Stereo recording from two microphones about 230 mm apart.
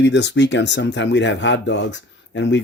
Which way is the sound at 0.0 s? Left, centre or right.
Left.